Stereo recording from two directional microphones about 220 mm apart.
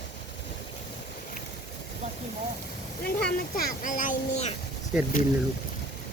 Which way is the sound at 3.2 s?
40° left (ahead or behind).